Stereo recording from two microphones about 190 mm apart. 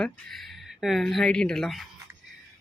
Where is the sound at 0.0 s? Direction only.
Centre (ahead or behind).